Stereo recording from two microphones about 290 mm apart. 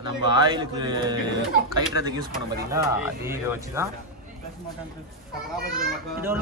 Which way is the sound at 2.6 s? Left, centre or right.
Centre.